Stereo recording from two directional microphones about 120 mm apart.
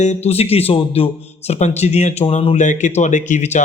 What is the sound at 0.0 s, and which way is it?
A man's voice, 65° left (ahead or behind).